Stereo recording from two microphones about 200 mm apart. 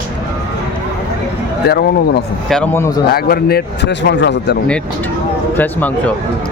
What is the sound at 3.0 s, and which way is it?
A man's voice, 50° left (ahead or behind).